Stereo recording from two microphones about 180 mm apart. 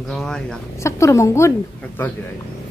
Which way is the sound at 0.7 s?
15° left (ahead or behind).